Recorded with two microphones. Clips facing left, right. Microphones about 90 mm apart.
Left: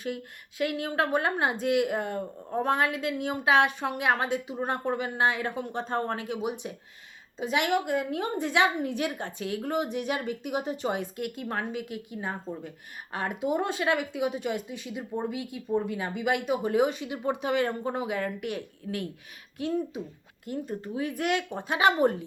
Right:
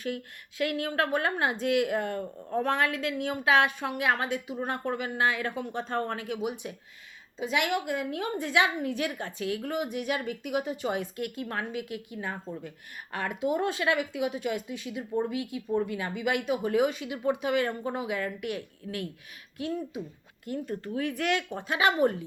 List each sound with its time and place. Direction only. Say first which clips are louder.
0.6 s speech: left 1 dB; 20° left (ahead or behind)
15.9 s speech: left 1 dB; 25° left (ahead or behind)